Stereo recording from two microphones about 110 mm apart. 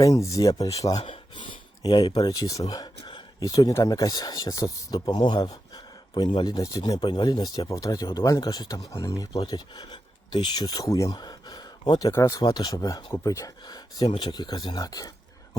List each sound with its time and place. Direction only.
0.0 s speech: 30° left (ahead or behind)
1.4 s speech: 45° left (ahead or behind)
4.9 s speech: 45° left (ahead or behind)
6.6 s speech: 30° left (ahead or behind)
7.0 s speech: 45° left (ahead or behind); by 12.4 s 30° left (ahead or behind)
12.5 s speech: 40° left (ahead or behind)